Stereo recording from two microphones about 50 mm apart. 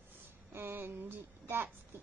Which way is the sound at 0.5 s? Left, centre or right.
Right.